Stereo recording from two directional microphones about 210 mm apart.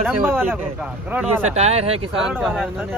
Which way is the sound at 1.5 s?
30° right (ahead or behind).